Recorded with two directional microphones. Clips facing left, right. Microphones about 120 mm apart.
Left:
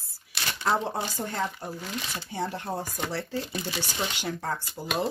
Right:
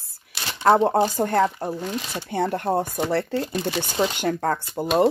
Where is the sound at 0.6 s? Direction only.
55° right (ahead or behind).